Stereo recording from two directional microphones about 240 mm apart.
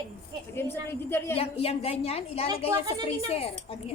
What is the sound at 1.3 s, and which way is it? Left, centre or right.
A woman's voice, left.